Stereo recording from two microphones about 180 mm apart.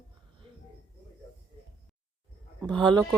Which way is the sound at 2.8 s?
25° right (ahead or behind).